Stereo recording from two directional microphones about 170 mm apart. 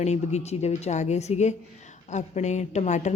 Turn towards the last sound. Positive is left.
turn(degrees=45)  # may be behind; listen again after turning